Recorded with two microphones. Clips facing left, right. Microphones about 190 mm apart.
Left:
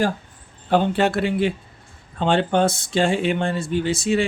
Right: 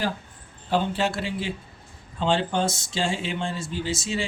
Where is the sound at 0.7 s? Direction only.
55° left (ahead or behind).